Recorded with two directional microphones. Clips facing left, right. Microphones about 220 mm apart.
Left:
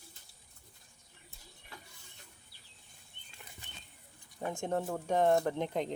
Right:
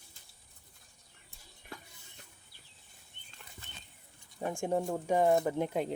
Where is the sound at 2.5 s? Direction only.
50° right (ahead or behind).